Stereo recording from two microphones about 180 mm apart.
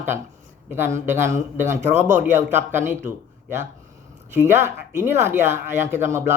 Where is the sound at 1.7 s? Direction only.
40° right (ahead or behind).